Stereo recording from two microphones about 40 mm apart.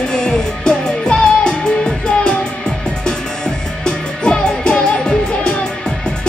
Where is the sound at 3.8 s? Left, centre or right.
Left.